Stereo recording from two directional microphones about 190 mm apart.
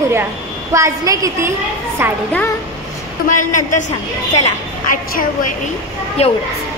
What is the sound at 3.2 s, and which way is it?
Speech, 40° left (ahead or behind).